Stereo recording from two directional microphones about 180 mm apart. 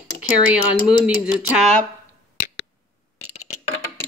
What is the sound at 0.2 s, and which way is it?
Speech, 5° right (ahead or behind).